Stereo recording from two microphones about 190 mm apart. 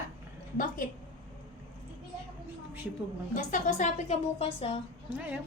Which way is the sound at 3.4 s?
40° left (ahead or behind).